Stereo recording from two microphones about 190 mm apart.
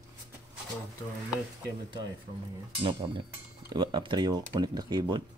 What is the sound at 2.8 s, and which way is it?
Speech, 30° right (ahead or behind).